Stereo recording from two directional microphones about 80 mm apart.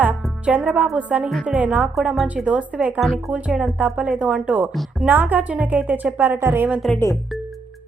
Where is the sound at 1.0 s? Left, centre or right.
Centre.